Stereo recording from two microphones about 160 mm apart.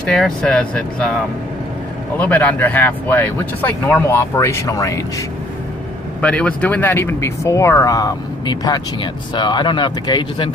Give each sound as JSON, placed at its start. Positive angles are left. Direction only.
{"t": 0.0, "sound": "speech", "side_deg": 5}
{"t": 2.1, "sound": "speech", "side_deg": 10}
{"t": 6.2, "sound": "speech", "side_deg": 10}